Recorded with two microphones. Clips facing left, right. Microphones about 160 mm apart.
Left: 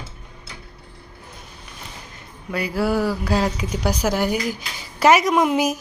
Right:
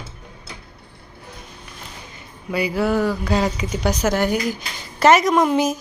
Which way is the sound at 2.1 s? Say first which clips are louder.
Right 3 dB; centre (ahead or behind).